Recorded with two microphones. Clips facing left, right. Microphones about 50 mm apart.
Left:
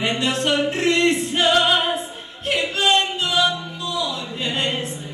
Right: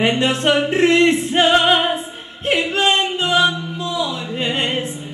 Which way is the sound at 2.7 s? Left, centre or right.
Right.